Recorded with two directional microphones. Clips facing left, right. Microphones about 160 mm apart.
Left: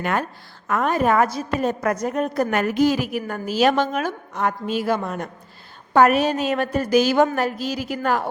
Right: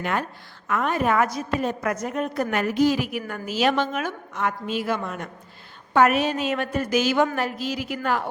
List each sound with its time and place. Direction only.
0.0 s a woman's voice: 50° left (ahead or behind)